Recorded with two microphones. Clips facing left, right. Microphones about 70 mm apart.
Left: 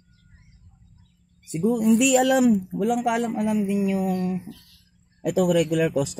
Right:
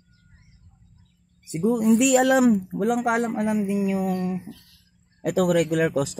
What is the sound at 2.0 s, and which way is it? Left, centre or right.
Speech, right.